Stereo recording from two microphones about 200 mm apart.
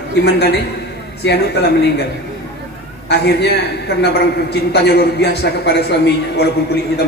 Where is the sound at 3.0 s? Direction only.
55° left (ahead or behind).